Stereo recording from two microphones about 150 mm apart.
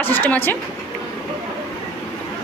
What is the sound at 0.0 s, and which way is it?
Speech, 15° left (ahead or behind).